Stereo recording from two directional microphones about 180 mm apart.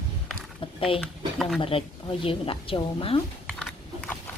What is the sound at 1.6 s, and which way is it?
A woman's voice, 30° left (ahead or behind).